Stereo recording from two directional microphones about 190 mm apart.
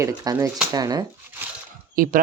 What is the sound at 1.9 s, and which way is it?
Speech, 45° right (ahead or behind).